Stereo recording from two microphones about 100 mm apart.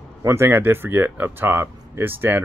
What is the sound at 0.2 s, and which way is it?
Speech, 25° right (ahead or behind).